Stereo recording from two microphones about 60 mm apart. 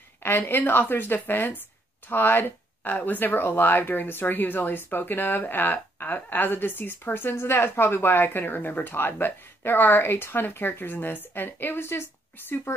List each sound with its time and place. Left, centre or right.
0.2 s speech: left